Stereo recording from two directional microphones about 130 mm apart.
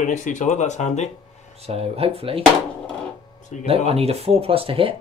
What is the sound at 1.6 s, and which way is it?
Speech, 50° right (ahead or behind).